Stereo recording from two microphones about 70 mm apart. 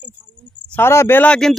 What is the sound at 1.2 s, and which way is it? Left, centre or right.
Speech, centre.